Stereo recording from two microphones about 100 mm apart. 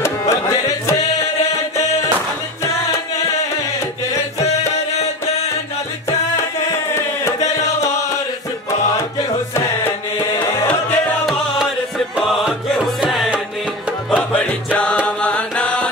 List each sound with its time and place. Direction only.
0.2 s music: 35° left (ahead or behind)
4.1 s music: 35° left (ahead or behind)
7.0 s chant: 25° left (ahead or behind)
12.2 s music: 5° right (ahead or behind)
14.1 s music: 15° left (ahead or behind)